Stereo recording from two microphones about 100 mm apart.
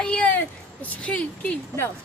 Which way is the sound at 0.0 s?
10° left (ahead or behind).